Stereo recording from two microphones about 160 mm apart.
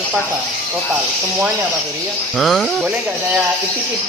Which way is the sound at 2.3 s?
Centre (ahead or behind).